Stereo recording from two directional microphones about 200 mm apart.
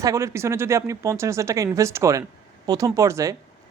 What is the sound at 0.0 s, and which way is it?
Speech, 15° right (ahead or behind).